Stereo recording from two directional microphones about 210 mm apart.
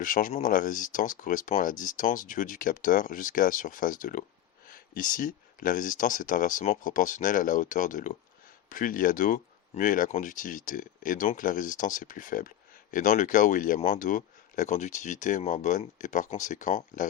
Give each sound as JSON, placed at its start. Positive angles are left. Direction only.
{"t": 0.0, "sound": "speech", "side_deg": 40}